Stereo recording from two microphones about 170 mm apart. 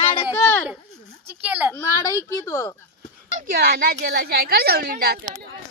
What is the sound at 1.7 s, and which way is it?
A woman's voice, 15° left (ahead or behind).